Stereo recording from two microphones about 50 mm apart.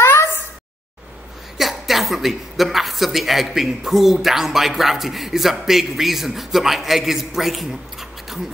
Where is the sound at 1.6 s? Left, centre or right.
Centre.